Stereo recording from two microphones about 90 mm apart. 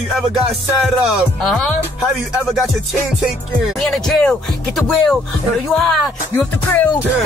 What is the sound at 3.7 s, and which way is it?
Speech, 5° left (ahead or behind).